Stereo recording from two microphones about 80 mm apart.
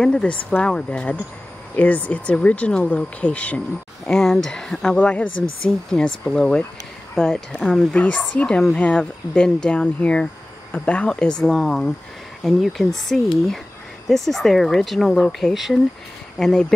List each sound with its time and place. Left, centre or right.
0.0 s speech: centre
4.0 s speech: centre